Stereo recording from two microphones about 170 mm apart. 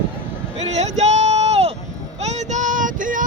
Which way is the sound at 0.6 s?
40° right (ahead or behind).